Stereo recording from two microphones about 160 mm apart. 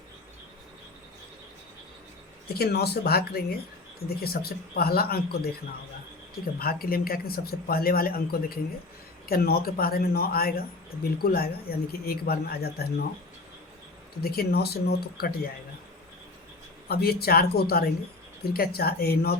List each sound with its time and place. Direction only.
2.5 s speech: 80° left
14.2 s speech: 75° left (ahead or behind)
16.9 s speech: 75° left (ahead or behind)